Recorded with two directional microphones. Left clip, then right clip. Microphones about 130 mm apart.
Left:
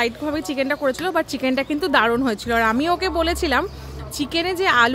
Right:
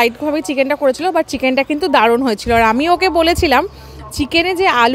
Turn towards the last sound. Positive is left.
turn(degrees=-40)  # may be behind; listen again after turning